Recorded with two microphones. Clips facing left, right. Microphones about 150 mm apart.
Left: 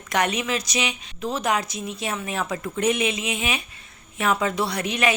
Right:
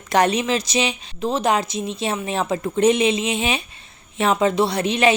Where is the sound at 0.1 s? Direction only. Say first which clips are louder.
Right 6 dB; 30° right (ahead or behind).